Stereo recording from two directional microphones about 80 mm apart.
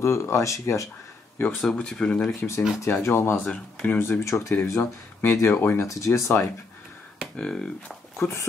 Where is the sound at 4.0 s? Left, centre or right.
Left.